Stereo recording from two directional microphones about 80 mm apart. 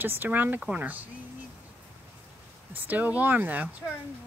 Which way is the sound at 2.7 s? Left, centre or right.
Right.